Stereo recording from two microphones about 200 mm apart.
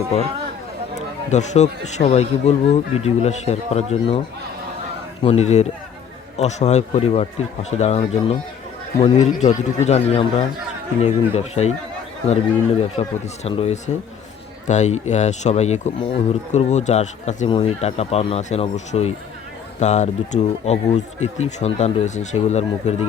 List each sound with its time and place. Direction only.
0.9 s speech: 35° left (ahead or behind)
5.2 s speech: 35° left (ahead or behind)
13.0 s speech: 30° left (ahead or behind)